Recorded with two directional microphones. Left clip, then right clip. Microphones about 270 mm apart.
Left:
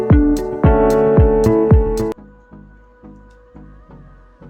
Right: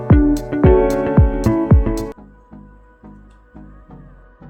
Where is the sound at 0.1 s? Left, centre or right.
Centre.